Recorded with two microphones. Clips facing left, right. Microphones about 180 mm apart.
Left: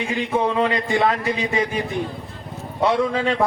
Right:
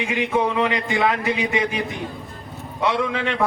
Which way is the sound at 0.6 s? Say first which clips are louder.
Left 1 dB; 30° left (ahead or behind).